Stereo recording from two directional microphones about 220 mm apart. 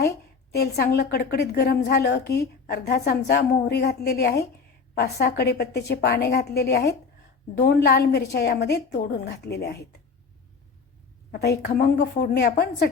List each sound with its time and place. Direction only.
0.5 s a woman's voice: 45° left (ahead or behind)
11.3 s a woman's voice: 50° left (ahead or behind)